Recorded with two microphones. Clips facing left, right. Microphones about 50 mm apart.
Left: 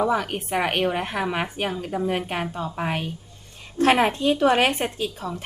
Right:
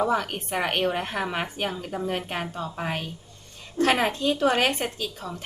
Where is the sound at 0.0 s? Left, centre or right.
Centre.